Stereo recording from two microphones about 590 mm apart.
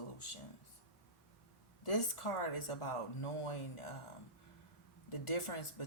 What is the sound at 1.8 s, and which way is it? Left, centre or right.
Speech, left.